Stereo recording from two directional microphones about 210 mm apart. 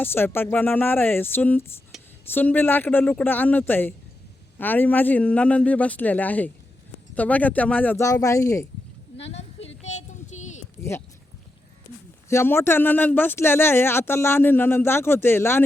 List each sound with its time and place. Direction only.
0.0 s speech: 10° left (ahead or behind)
9.1 s a sound: 30° left (ahead or behind)
12.3 s speech: 10° left (ahead or behind)